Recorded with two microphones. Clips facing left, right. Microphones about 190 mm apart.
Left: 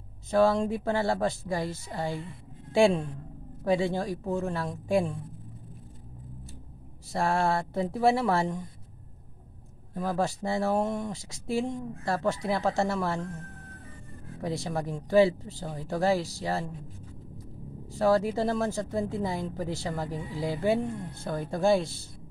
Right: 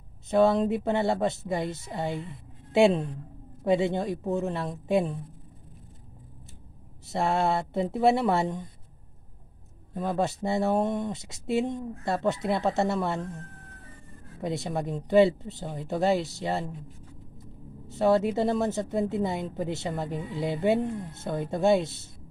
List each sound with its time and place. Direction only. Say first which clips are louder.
0.3 s a woman's voice: right 2 dB; 20° right (ahead or behind)
3.8 s a woman's voice: right 2 dB; 20° right (ahead or behind)
7.1 s a woman's voice: right 1 dB; 20° right (ahead or behind)
10.0 s a woman's voice: right 1 dB; 20° right (ahead or behind)
14.4 s a woman's voice: right 1 dB; 20° right (ahead or behind)
17.9 s a woman's voice: right 1 dB; 20° right (ahead or behind)
20.2 s speech: right 2 dB; centre (ahead or behind)
20.6 s a woman's voice: right 2 dB; 20° right (ahead or behind)